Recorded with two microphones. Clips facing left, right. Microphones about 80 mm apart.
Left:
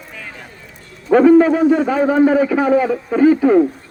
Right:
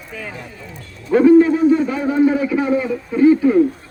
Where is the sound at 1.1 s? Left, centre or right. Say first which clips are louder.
Left 1 dB; left.